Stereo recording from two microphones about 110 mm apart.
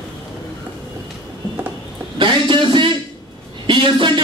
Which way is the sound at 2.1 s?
45° right (ahead or behind).